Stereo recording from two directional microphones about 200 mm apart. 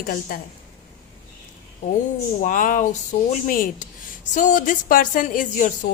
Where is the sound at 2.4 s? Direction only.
40° left (ahead or behind).